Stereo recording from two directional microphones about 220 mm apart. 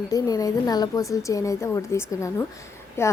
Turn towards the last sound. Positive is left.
turn(degrees=10)  # may be behind; listen again after turning